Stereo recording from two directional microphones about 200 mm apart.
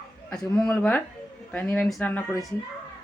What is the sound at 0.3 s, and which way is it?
Speech, 5° left (ahead or behind).